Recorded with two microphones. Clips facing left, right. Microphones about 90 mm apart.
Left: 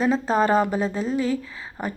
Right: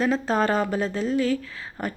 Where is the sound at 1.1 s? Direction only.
30° left (ahead or behind).